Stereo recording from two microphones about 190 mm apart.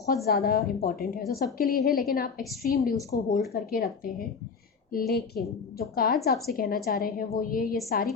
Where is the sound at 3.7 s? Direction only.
50° left (ahead or behind).